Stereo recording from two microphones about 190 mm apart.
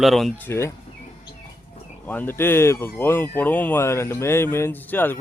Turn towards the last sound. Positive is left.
turn(degrees=10)  # may be behind; listen again after turning